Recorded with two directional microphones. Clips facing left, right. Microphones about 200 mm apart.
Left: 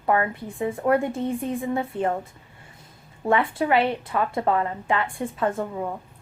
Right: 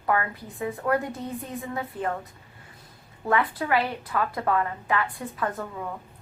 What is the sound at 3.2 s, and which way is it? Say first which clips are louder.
A woman's voice: left 3 dB; 25° left (ahead or behind).